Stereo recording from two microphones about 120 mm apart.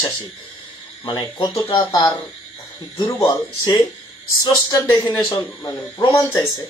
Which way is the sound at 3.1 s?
30° left (ahead or behind).